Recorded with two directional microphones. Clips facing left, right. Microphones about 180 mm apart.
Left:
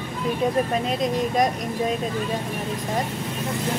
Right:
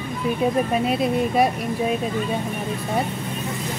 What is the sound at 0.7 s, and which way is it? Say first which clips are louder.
Speech: right 3 dB; 10° right (ahead or behind).